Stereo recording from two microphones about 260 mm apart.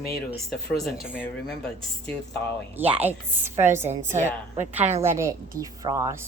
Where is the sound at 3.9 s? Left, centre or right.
Right.